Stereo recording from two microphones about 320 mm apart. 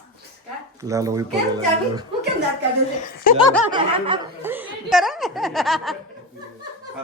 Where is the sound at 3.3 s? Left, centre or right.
Left.